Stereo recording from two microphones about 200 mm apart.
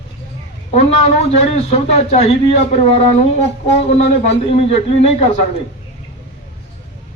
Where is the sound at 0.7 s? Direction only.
30° left (ahead or behind).